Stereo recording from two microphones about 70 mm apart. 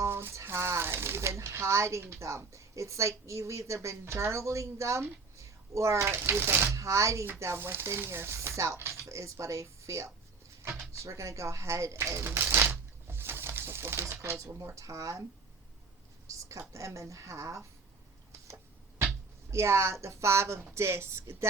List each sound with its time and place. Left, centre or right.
0.0 s speech: right
6.1 s speech: right
16.2 s speech: right
18.5 s music: right
19.5 s speech: right